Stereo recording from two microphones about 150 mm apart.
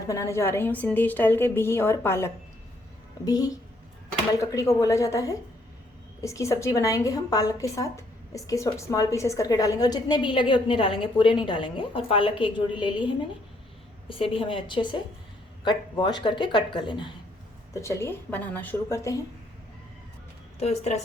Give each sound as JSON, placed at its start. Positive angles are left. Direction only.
{"t": 0.1, "sound": "a woman's voice", "side_deg": 20}
{"t": 14.1, "sound": "speech", "side_deg": 35}
{"t": 17.7, "sound": "a woman's voice", "side_deg": 20}
{"t": 20.6, "sound": "a woman's voice", "side_deg": 45}